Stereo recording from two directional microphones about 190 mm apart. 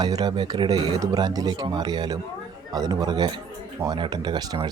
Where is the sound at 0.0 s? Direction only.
20° right (ahead or behind).